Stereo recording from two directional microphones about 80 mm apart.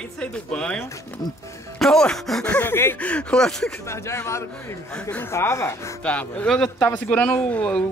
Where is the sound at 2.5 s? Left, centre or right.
Left.